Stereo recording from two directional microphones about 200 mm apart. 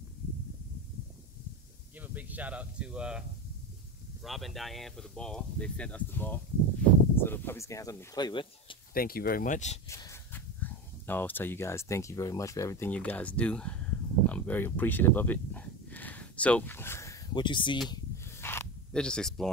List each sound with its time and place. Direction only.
2.0 s speech: 10° right (ahead or behind); by 8.7 s 25° left (ahead or behind)
8.9 s speech: 50° left (ahead or behind)
9.8 s speech: 15° left (ahead or behind)
17.8 s a sound: 15° left (ahead or behind)
18.9 s speech: 5° left (ahead or behind)